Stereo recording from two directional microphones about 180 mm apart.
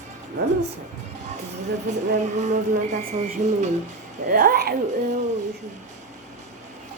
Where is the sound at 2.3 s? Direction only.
40° right (ahead or behind).